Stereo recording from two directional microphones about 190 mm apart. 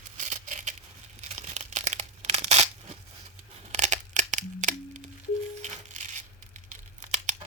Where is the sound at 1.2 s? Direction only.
35° right (ahead or behind).